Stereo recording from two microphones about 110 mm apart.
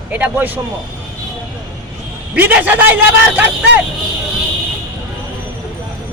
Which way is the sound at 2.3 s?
15° right (ahead or behind).